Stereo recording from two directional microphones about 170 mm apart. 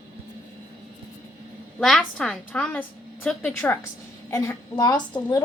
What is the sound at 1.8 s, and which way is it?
A child's voice, 5° left (ahead or behind).